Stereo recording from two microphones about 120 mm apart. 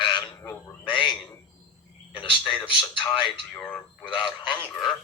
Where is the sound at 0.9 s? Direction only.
40° left (ahead or behind).